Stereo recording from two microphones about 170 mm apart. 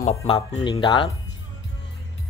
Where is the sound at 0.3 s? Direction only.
30° left (ahead or behind).